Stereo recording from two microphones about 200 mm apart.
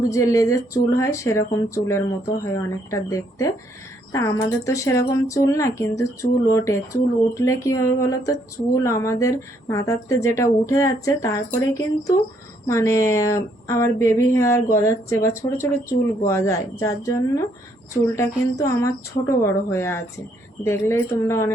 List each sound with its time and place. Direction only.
0.1 s speech: 15° left (ahead or behind)